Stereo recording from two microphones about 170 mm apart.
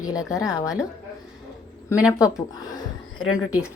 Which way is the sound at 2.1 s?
20° left (ahead or behind).